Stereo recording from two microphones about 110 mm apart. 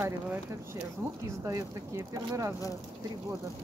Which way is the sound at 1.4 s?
30° right (ahead or behind).